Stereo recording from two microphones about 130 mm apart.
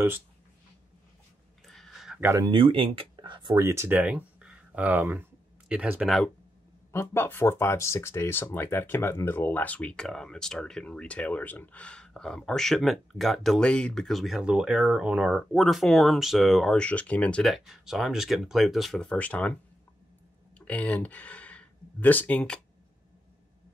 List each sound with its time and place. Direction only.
1.7 s a sound: centre (ahead or behind)
2.1 s speech: 15° right (ahead or behind)
2.4 s speech: 40° right (ahead or behind)
3.5 s speech: 20° right (ahead or behind)
6.0 s speech: centre (ahead or behind)
6.9 s speech: 20° left (ahead or behind)
20.5 s speech: 10° left (ahead or behind)